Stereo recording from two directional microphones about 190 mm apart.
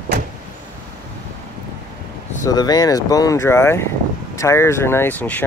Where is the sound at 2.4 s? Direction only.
20° left (ahead or behind).